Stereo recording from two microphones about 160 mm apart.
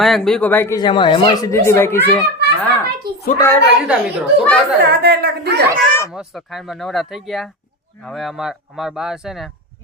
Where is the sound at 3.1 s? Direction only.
75° right (ahead or behind).